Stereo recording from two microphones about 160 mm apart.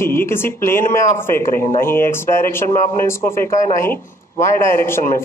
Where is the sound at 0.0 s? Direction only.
15° left (ahead or behind).